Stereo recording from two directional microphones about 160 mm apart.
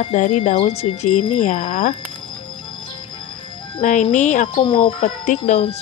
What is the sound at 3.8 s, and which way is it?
Speech, 50° left (ahead or behind).